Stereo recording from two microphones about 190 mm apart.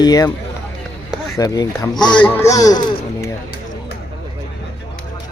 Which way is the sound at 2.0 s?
5° left (ahead or behind).